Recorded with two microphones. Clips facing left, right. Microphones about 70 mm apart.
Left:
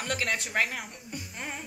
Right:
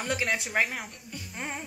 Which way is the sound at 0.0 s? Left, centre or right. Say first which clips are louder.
Right 1 dB; centre.